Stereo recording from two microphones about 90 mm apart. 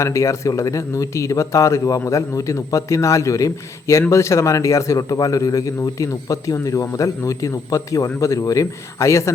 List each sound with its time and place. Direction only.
0.0 s a man's voice: 35° left (ahead or behind)